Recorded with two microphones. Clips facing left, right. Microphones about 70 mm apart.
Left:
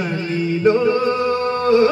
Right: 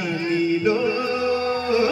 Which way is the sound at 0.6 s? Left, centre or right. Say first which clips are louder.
Left 5 dB; left.